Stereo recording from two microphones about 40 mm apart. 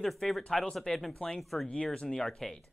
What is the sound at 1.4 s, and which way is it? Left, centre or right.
Speech, centre.